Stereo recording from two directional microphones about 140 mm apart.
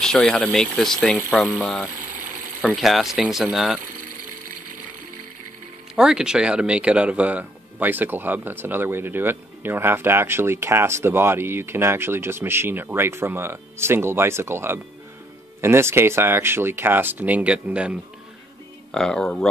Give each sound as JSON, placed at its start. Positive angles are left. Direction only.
{"t": 0.0, "sound": "speech", "side_deg": 5}
{"t": 5.9, "sound": "speech", "side_deg": -5}
{"t": 18.9, "sound": "speech", "side_deg": 5}